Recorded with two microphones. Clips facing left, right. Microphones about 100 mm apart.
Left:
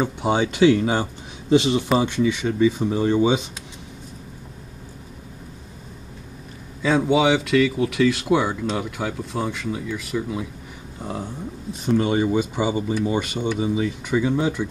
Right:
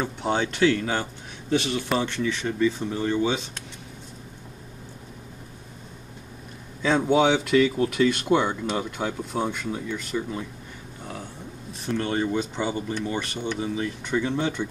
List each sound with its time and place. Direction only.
0.0 s speech: 10° left (ahead or behind)
6.8 s speech: 5° left (ahead or behind)
11.0 s a sound: 30° left (ahead or behind)
11.8 s speech: 10° left (ahead or behind)